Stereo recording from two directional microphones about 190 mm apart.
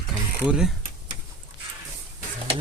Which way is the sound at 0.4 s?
5° right (ahead or behind).